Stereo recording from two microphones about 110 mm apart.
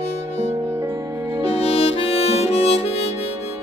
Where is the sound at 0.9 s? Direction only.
45° right (ahead or behind).